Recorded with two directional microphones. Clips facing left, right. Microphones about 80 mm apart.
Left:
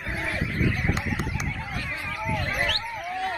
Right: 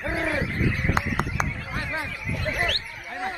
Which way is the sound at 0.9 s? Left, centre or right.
Right.